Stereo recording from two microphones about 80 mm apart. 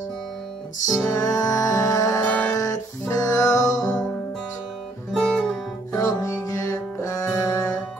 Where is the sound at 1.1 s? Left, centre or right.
Left.